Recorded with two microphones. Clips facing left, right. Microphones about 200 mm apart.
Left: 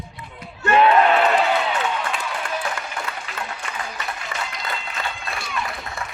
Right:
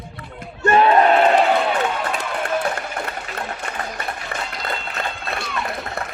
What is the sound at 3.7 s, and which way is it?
Run, 55° right (ahead or behind).